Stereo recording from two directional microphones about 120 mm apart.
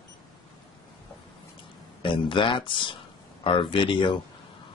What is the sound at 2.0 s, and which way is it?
Speech, 40° left (ahead or behind).